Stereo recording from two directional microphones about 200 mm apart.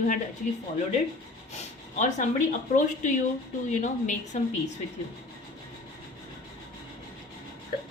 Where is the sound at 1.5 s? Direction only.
35° left (ahead or behind).